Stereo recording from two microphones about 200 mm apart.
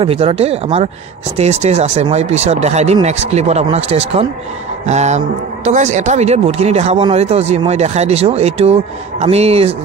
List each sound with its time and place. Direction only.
0.0 s a man's voice: 30° right (ahead or behind)